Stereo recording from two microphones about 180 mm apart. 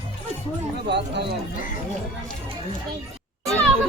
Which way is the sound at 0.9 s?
70° right (ahead or behind).